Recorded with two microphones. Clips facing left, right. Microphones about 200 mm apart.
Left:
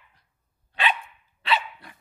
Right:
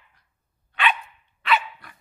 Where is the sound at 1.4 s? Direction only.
30° left (ahead or behind).